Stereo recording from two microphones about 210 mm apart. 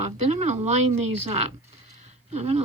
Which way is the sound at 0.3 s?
35° right (ahead or behind).